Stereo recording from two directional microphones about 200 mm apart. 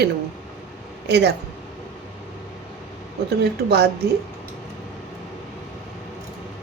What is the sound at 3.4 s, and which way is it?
Speech, 55° right (ahead or behind).